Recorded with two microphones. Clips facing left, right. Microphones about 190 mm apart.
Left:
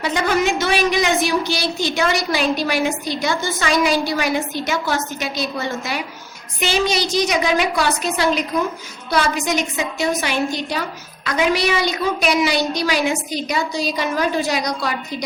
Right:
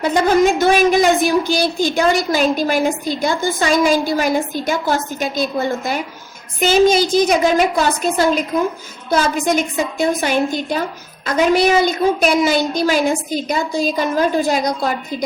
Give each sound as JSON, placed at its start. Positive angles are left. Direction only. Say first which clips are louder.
{"t": 0.0, "sound": "a woman's voice", "louder": "right 5 dB", "side_deg": -45}